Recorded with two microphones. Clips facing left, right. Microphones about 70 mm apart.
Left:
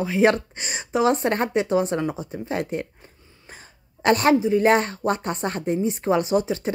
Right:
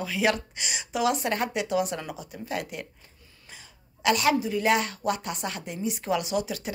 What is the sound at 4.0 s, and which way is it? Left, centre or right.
Speech, left.